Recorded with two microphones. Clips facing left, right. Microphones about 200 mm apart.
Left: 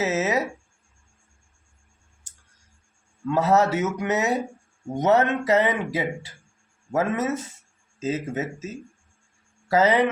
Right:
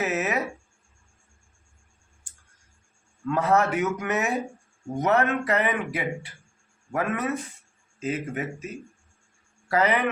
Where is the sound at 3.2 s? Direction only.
20° left (ahead or behind).